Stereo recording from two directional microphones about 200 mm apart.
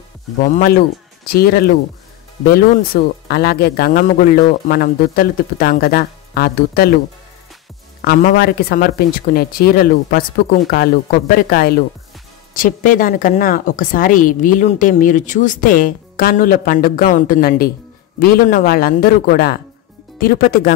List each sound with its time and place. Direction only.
0.4 s a woman's voice: 45° left (ahead or behind)
8.0 s a woman's voice: 50° left (ahead or behind)